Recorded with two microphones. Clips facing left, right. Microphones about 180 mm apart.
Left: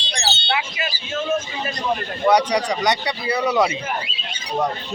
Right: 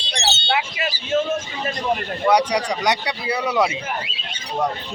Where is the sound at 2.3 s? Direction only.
10° right (ahead or behind).